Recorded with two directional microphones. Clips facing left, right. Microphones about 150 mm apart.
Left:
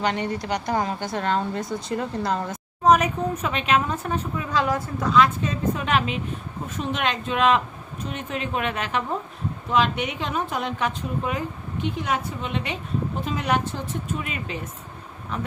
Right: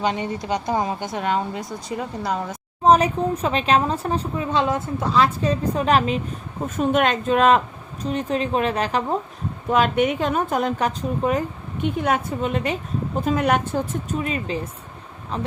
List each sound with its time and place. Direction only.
0.0 s a woman's voice: 20° right (ahead or behind)
2.8 s a woman's voice: 30° right (ahead or behind)
9.6 s a woman's voice: 50° right (ahead or behind); by 15.5 s 30° right (ahead or behind)